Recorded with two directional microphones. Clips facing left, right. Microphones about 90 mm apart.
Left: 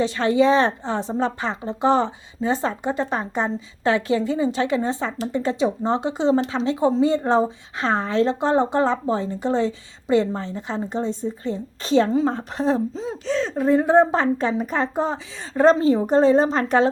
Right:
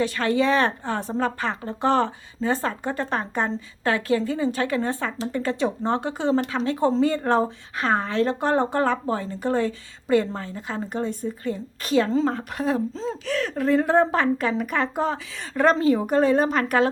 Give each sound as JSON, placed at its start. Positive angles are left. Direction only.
{"t": 0.0, "sound": "a woman's voice", "side_deg": 25}
{"t": 12.9, "sound": "a woman's voice", "side_deg": 15}